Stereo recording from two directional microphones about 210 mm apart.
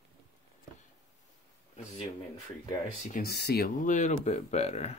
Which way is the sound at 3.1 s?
45° left (ahead or behind).